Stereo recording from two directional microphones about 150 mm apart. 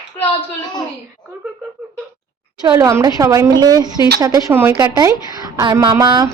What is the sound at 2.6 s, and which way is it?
A woman's voice, 25° right (ahead or behind).